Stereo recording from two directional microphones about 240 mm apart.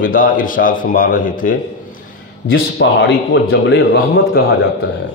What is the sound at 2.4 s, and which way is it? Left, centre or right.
Speech, left.